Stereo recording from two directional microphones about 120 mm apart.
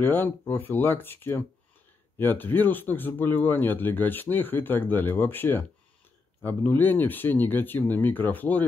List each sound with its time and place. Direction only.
0.0 s speech: 15° left (ahead or behind)